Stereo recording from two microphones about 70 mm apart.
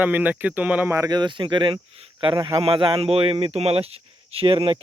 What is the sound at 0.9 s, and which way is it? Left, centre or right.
Speech, right.